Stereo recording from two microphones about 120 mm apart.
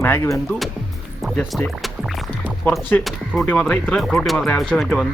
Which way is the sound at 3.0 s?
Centre (ahead or behind).